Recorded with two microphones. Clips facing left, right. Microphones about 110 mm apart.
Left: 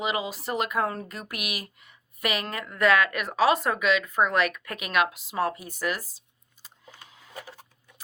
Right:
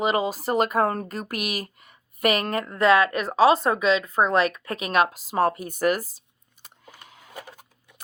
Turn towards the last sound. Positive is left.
turn(degrees=-50)  # may be behind; listen again after turning